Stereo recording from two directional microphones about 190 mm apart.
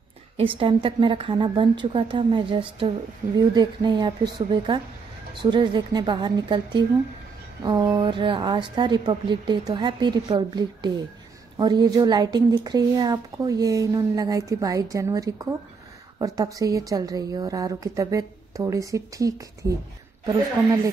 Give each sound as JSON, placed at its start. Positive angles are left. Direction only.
{"t": 0.4, "sound": "speech", "side_deg": -30}
{"t": 3.2, "sound": "speech", "side_deg": -45}
{"t": 3.5, "sound": "a woman's voice", "side_deg": -25}